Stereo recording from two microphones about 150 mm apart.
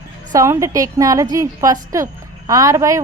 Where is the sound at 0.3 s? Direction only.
20° right (ahead or behind).